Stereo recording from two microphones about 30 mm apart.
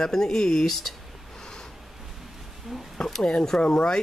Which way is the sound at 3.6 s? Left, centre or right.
Left.